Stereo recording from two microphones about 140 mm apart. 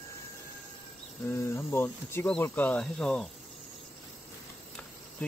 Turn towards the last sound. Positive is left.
turn(degrees=10)  # may be behind; listen again after turning